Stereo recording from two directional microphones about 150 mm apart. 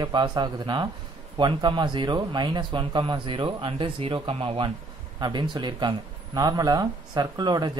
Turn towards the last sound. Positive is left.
turn(degrees=-25)  # may be behind; listen again after turning